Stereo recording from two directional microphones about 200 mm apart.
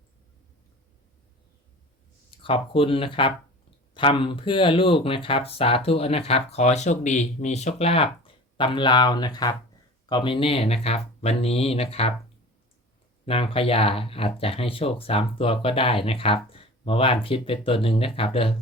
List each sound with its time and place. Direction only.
2.4 s speech: 25° left (ahead or behind)
13.2 s speech: 30° left (ahead or behind)